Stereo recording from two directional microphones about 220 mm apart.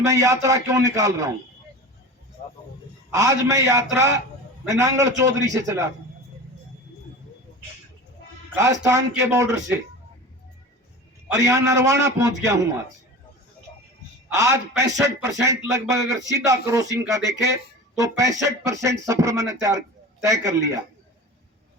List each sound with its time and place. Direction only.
0.0 s speech: 15° right (ahead or behind)
2.4 s music: 35° left (ahead or behind)
3.1 s speech: 15° right (ahead or behind)
8.5 s speech: 15° right (ahead or behind)
11.3 s speech: 15° right (ahead or behind)
14.3 s speech: 15° right (ahead or behind)